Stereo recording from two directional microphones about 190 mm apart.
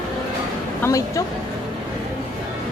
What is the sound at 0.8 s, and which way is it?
Speech, 15° left (ahead or behind).